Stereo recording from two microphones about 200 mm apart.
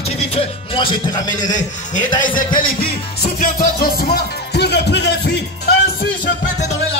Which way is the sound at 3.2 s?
45° left (ahead or behind).